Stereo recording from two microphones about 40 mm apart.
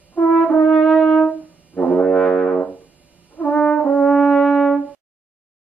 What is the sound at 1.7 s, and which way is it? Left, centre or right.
Brass instrument, left.